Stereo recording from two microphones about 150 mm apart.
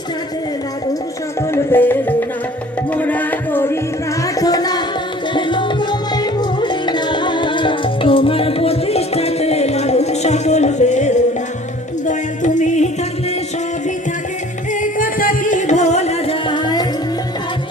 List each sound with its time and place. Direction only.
1.4 s music: 15° left (ahead or behind)
4.4 s music: 25° left (ahead or behind); by 12.9 s 50° left (ahead or behind)
14.7 s music: 60° left (ahead or behind); by 16.8 s 30° left (ahead or behind)